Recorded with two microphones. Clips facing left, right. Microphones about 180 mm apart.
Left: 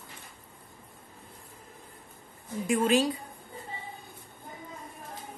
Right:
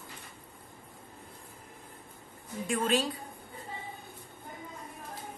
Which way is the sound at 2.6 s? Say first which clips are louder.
Left 4 dB; 5° left (ahead or behind).